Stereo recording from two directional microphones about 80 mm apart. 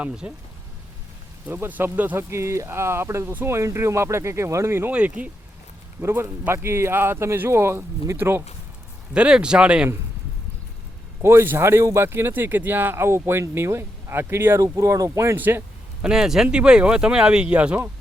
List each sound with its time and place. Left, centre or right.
0.0 s speech: centre
1.5 s speech: right
2.1 s speech: right
4.9 s speech: centre
6.0 s speech: right
9.1 s speech: centre
11.2 s speech: right
15.4 s speech: right
16.0 s speech: centre